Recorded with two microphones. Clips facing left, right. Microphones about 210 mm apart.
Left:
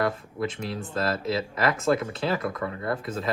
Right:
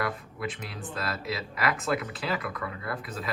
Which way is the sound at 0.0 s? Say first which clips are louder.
Left 5 dB; 25° left (ahead or behind).